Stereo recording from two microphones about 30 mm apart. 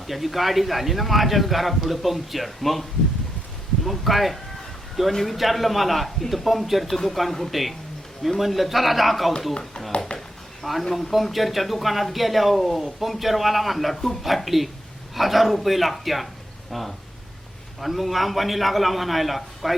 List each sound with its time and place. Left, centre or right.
0.1 s speech: centre
3.8 s speech: centre
10.1 s a sound: left
10.6 s speech: centre